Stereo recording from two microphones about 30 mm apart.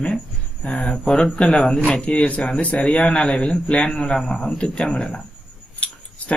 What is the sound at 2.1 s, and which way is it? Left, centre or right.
Speech, left.